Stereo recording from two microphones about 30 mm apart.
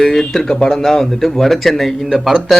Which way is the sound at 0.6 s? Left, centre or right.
Centre.